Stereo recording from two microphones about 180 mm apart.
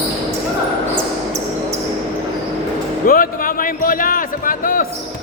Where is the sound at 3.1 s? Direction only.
50° left (ahead or behind).